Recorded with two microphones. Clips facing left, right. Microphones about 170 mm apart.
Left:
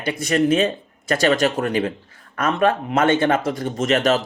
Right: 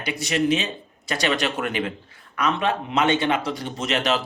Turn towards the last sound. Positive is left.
turn(degrees=45)  # may be behind; listen again after turning